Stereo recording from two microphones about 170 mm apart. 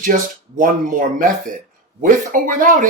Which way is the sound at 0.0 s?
50° right (ahead or behind).